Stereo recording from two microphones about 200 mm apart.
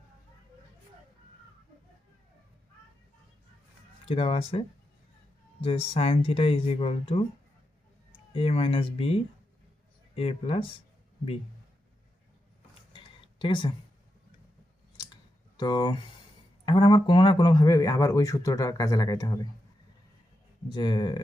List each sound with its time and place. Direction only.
4.0 s speech: 30° left (ahead or behind)
12.9 s a sound: 25° left (ahead or behind)
14.9 s clicking: 20° left (ahead or behind)
16.6 s speech: 25° left (ahead or behind)
20.7 s speech: 20° left (ahead or behind)